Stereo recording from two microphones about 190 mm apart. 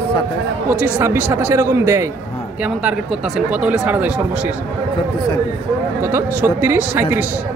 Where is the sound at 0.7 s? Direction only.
10° right (ahead or behind).